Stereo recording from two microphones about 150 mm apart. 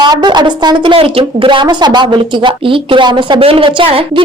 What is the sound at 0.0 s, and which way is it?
Speech, 30° right (ahead or behind).